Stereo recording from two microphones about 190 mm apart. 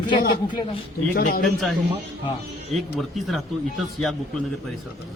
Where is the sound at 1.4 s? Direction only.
Centre (ahead or behind).